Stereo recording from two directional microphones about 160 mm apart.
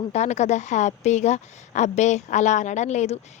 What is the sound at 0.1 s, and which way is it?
A woman's voice, 45° left (ahead or behind).